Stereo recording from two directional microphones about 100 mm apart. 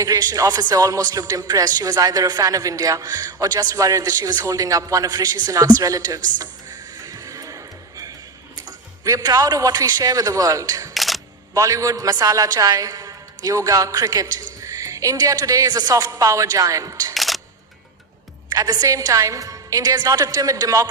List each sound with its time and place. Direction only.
0.0 s a man's voice: 40° right (ahead or behind)
10.9 s single-lens reflex camera: centre (ahead or behind)
11.5 s a man's voice: 35° right (ahead or behind)
17.2 s single-lens reflex camera: centre (ahead or behind)
18.4 s a man's voice: 40° right (ahead or behind)